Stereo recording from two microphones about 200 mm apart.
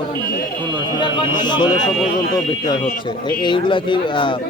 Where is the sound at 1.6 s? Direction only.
Centre (ahead or behind).